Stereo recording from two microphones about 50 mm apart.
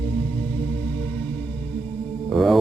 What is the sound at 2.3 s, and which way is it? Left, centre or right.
Mantra, centre.